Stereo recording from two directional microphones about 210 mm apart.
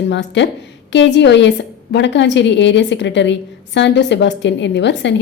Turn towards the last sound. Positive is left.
turn(degrees=55)  # may be behind; listen again after turning